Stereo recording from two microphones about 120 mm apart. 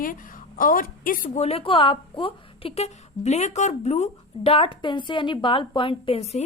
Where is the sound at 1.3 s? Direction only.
60° left (ahead or behind); by 6.2 s 45° left (ahead or behind).